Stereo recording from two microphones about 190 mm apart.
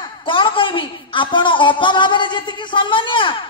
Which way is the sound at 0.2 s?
25° left (ahead or behind).